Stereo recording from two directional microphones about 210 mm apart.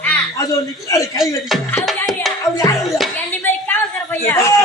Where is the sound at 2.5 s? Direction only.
15° left (ahead or behind).